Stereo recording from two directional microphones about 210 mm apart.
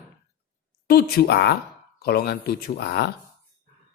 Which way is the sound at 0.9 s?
45° left (ahead or behind).